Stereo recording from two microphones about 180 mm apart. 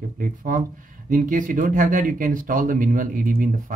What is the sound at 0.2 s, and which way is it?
Speech, 50° right (ahead or behind).